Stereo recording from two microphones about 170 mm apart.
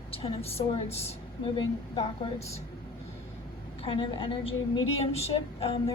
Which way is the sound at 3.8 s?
30° left (ahead or behind).